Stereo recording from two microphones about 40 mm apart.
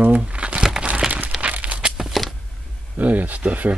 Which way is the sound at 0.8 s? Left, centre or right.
Right.